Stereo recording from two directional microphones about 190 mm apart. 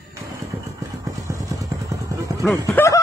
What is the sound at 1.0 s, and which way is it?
Vehicle, 15° right (ahead or behind).